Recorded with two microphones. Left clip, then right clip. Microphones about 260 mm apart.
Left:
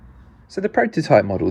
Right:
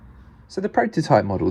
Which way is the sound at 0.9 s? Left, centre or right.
Right.